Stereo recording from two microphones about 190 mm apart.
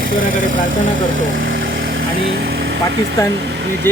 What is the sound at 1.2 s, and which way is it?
Vehicle, 45° right (ahead or behind).